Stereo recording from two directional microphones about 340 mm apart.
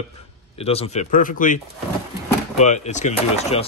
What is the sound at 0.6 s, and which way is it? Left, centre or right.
Speech, centre.